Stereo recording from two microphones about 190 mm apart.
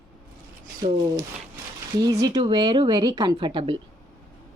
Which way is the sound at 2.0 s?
20° right (ahead or behind).